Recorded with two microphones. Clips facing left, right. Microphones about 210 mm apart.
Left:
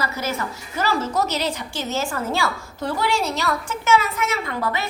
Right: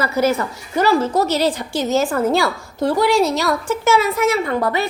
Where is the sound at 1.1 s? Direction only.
30° right (ahead or behind).